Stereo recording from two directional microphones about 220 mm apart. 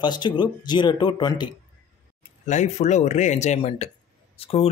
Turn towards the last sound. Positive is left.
turn(degrees=25)  # may be behind; listen again after turning